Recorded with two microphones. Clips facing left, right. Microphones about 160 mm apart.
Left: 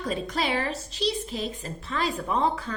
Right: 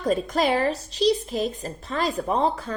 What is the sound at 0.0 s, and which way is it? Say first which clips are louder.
A woman's voice: right 6 dB; 45° right (ahead or behind).